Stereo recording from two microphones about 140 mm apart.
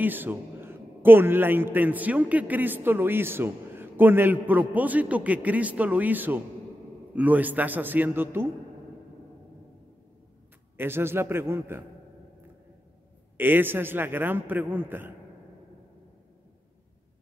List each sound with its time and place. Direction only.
0.0 s a man's voice: 15° right (ahead or behind)
10.8 s a man's voice: 15° right (ahead or behind)
13.4 s a man's voice: 15° right (ahead or behind)